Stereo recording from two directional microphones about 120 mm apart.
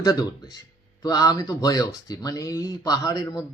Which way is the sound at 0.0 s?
30° left (ahead or behind).